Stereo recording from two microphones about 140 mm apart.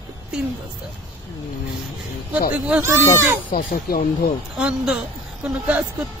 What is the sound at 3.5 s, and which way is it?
Speech, 90° left.